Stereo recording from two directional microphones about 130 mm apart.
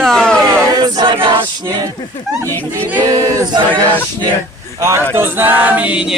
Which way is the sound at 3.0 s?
25° right (ahead or behind).